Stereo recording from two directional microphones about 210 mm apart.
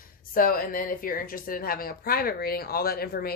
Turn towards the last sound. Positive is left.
turn(degrees=45)  # may be behind; listen again after turning